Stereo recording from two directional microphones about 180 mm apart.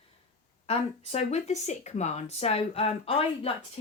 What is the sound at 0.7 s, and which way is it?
Speech, 35° left (ahead or behind).